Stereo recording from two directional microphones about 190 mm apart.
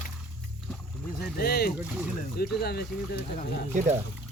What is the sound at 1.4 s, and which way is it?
Speech, 55° left (ahead or behind).